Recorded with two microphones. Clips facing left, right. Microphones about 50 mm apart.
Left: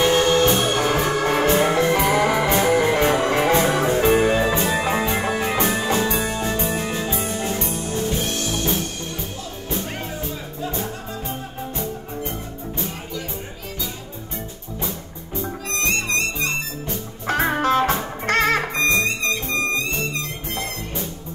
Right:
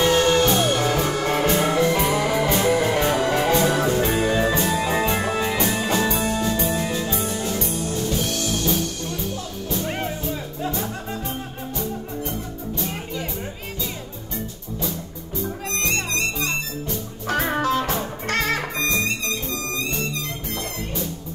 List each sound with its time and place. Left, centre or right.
0.0 s music: left
11.7 s music: left
15.8 s music: left